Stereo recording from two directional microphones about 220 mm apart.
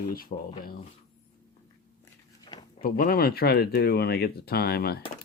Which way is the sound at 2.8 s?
40° left (ahead or behind).